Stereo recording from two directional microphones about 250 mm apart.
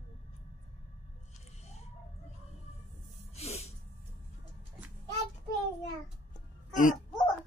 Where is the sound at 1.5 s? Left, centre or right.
Left.